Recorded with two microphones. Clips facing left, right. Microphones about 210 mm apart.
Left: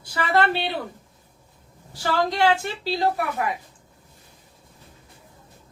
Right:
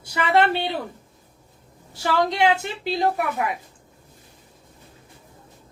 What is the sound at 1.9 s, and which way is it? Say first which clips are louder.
A woman's voice: right 1 dB; 20° right (ahead or behind).